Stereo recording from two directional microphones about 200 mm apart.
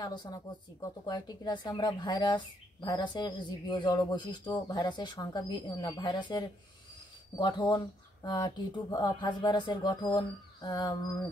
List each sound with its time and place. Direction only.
0.0 s speech: 20° left (ahead or behind)